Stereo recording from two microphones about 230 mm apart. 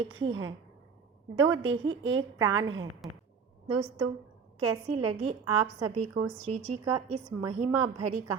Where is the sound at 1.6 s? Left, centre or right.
Right.